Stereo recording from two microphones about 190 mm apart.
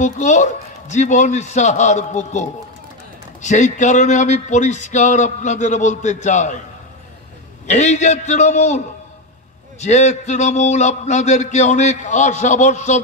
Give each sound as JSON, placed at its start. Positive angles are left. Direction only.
{"t": 0.0, "sound": "a man's voice", "side_deg": 40}
{"t": 3.4, "sound": "a man's voice", "side_deg": 40}
{"t": 7.6, "sound": "a man's voice", "side_deg": 40}